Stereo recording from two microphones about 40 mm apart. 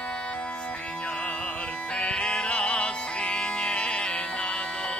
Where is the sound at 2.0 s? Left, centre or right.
Left.